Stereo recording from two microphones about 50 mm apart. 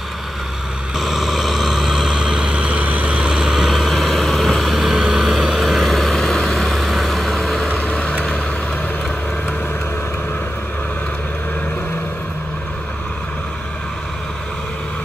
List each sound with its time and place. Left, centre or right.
0.9 s vehicle: centre
2.5 s vehicle: right
3.3 s vehicle: centre
7.6 s vehicle: left